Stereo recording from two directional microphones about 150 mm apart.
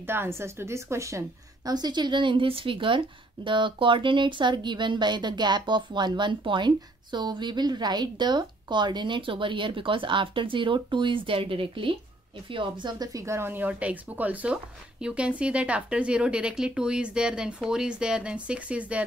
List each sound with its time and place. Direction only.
0.0 s speech: 15° right (ahead or behind)